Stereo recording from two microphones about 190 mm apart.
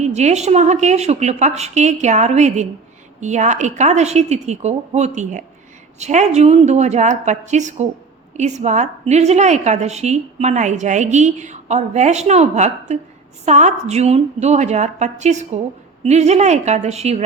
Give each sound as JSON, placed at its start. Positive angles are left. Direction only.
{"t": 0.0, "sound": "a woman's voice", "side_deg": -35}